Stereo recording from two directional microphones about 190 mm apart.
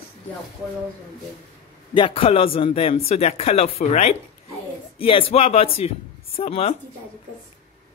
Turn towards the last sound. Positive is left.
turn(degrees=30)  # may be behind; listen again after turning